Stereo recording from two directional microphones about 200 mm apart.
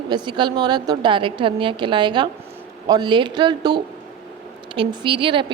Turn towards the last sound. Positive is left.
turn(degrees=-25)  # may be behind; listen again after turning